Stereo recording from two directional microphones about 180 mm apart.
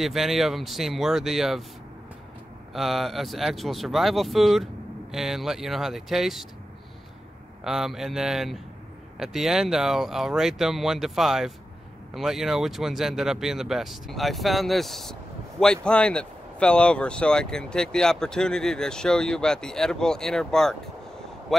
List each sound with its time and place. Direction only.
0.0 s speech: centre (ahead or behind)
2.7 s speech: centre (ahead or behind)
7.6 s speech: centre (ahead or behind)